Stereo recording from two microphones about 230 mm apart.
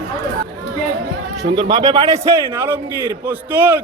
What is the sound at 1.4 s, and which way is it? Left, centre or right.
A man's voice, right.